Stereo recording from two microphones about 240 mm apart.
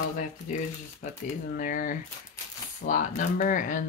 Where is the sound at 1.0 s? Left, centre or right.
Left.